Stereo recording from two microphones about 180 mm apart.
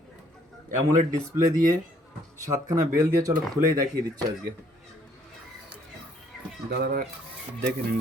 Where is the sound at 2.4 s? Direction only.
20° right (ahead or behind).